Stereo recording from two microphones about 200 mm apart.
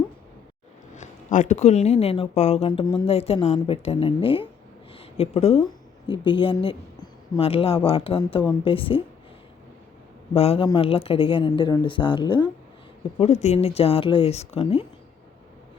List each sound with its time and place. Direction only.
0.9 s a woman's voice: 40° left (ahead or behind)
10.3 s speech: 30° left (ahead or behind)